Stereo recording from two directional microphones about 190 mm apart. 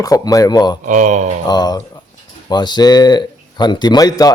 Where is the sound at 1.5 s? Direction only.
20° left (ahead or behind).